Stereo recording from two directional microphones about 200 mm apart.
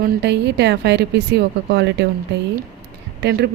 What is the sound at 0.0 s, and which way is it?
Speech, 60° right (ahead or behind).